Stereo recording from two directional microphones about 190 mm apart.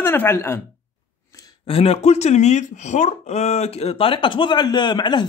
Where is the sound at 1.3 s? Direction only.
30° left (ahead or behind).